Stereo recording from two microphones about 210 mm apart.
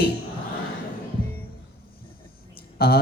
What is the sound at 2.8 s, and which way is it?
Speech, 45° left (ahead or behind).